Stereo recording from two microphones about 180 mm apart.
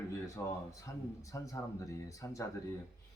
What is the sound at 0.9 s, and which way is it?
Speech, 15° left (ahead or behind).